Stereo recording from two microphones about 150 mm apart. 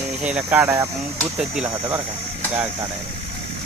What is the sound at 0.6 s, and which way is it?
Speech, 20° right (ahead or behind).